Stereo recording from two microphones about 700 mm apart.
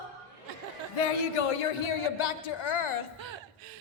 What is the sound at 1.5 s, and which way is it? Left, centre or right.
Speech, left.